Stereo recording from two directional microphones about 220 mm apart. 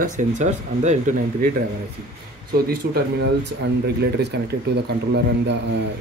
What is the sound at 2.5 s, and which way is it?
Speech, 40° right (ahead or behind).